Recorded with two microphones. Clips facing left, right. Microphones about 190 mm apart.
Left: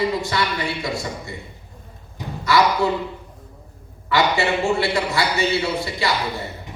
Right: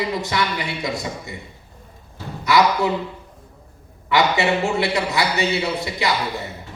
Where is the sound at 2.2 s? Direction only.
15° left (ahead or behind).